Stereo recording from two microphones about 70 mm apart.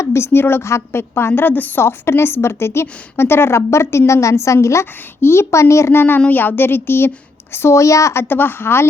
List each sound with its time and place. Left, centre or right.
0.0 s a woman's voice: left
1.8 s a woman's voice: left